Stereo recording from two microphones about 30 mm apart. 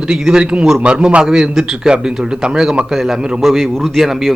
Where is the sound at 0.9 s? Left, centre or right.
Right.